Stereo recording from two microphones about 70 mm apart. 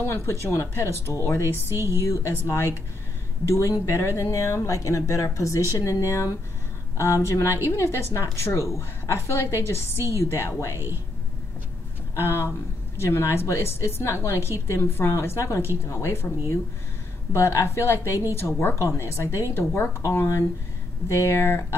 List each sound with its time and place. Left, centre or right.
0.1 s a woman's voice: left
1.4 s speech: right
2.0 s a woman's voice: left
12.2 s a woman's voice: left
19.5 s a woman's voice: left